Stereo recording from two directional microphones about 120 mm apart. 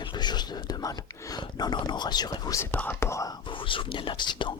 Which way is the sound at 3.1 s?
30° left (ahead or behind).